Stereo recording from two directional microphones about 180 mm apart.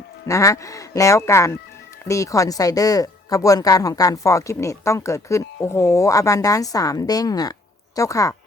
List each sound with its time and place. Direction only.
0.3 s speech: 15° left (ahead or behind)